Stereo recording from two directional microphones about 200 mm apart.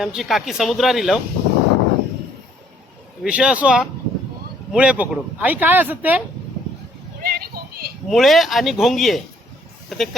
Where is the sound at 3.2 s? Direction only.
5° right (ahead or behind).